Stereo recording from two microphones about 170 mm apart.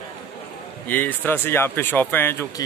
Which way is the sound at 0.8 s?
10° left (ahead or behind).